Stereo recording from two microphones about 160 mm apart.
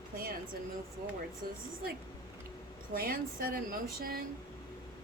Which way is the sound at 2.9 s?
65° right (ahead or behind).